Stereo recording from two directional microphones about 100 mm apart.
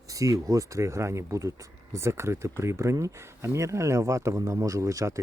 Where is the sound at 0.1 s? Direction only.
35° right (ahead or behind).